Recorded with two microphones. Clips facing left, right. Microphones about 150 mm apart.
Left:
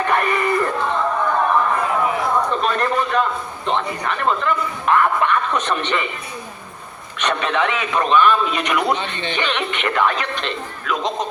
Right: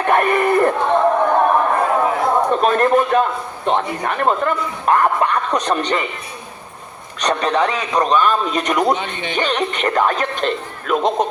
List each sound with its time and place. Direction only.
0.1 s a sound: 50° right (ahead or behind)
3.7 s speech: 45° right (ahead or behind)
7.2 s speech: 35° right (ahead or behind)
9.0 s a man's voice: 10° right (ahead or behind)
9.3 s speech: 40° right (ahead or behind)